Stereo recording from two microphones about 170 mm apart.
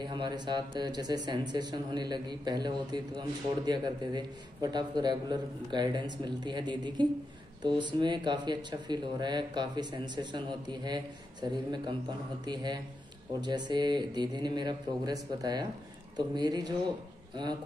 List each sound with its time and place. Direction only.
0.0 s speech: 25° right (ahead or behind)